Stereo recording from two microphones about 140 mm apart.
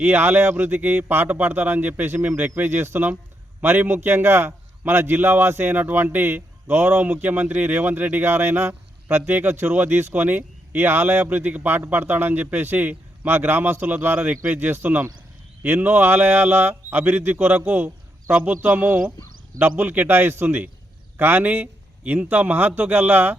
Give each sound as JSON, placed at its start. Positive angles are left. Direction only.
{"t": 0.0, "sound": "a man's voice", "side_deg": -15}